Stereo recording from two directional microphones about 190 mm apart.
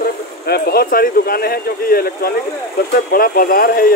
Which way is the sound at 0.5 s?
55° left (ahead or behind).